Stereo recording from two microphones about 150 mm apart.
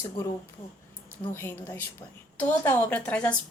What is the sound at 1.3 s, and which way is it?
A woman's voice, 15° left (ahead or behind).